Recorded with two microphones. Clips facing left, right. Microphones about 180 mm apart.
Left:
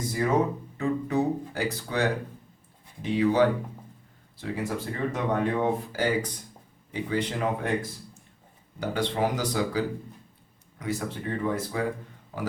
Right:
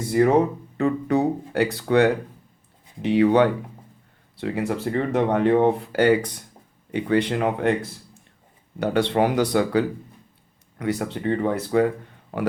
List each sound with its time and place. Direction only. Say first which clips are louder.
0.2 s speech: right 7 dB; 70° right (ahead or behind)